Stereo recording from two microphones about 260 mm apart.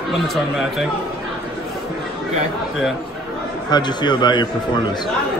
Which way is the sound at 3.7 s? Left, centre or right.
Centre.